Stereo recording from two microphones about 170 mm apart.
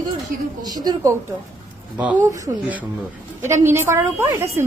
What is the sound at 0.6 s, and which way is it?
Speech, 25° right (ahead or behind).